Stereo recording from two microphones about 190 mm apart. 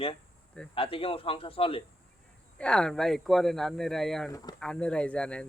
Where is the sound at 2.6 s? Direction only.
5° left (ahead or behind).